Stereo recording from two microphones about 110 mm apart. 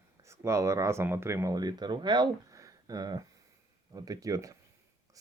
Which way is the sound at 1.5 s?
40° right (ahead or behind).